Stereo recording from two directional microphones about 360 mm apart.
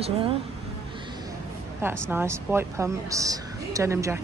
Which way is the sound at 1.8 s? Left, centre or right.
Centre.